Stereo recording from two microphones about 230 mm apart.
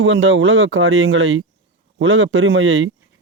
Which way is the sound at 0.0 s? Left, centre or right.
Right.